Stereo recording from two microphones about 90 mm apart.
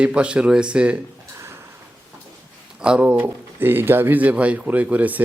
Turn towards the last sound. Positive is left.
turn(degrees=-20)  # may be behind; listen again after turning